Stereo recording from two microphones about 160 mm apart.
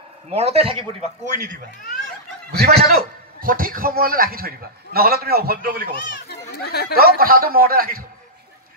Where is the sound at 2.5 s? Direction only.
80° right.